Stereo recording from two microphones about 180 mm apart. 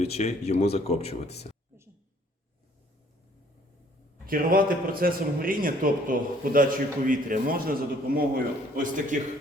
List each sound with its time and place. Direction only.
0.0 s speech: 35° left (ahead or behind)
4.3 s a man's voice: 50° right (ahead or behind)